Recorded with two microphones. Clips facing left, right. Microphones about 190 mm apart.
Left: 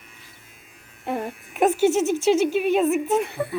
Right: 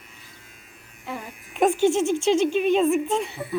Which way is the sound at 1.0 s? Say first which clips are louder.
Left 7 dB; 55° left (ahead or behind).